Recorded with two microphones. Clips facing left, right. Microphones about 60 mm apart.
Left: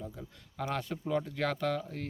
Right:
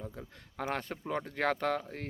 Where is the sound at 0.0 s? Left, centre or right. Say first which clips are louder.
Even; right.